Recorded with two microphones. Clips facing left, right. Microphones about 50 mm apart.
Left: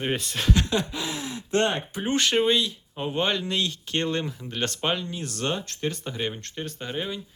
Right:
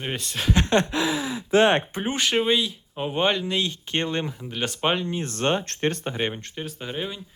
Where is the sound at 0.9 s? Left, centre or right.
Right.